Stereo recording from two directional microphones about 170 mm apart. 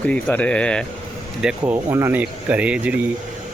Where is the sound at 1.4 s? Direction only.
5° right (ahead or behind).